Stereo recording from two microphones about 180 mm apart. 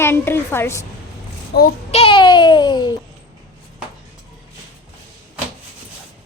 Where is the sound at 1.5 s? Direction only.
65° left (ahead or behind).